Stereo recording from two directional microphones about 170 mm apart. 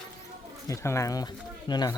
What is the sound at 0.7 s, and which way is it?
Speech, 15° left (ahead or behind).